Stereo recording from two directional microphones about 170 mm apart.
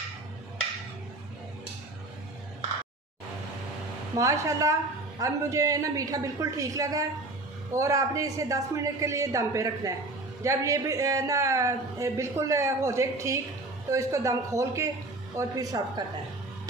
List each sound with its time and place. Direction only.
4.1 s a woman's voice: 20° right (ahead or behind)